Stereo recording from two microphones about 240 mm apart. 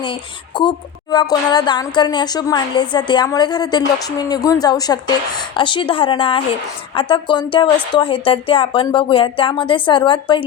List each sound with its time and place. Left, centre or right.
0.0 s a woman's voice: centre